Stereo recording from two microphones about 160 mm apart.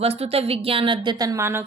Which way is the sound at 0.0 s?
40° right (ahead or behind).